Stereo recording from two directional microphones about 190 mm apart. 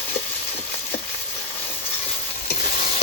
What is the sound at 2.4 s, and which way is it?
Stir, 45° left (ahead or behind).